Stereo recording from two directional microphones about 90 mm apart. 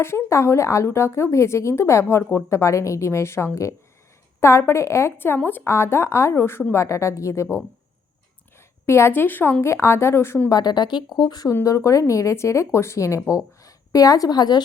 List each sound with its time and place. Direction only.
0.0 s speech: 30° left (ahead or behind)
8.9 s speech: 30° left (ahead or behind)
10.5 s speech: 50° left (ahead or behind)
11.6 s speech: 35° left (ahead or behind); by 14.6 s 50° left (ahead or behind)